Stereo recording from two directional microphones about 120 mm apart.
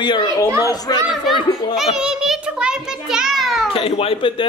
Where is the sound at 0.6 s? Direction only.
35° left (ahead or behind).